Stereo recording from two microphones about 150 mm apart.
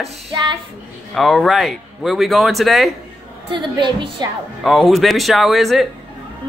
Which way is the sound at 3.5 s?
30° right (ahead or behind).